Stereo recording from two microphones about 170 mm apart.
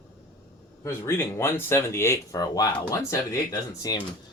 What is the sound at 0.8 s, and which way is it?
Speech, 15° left (ahead or behind).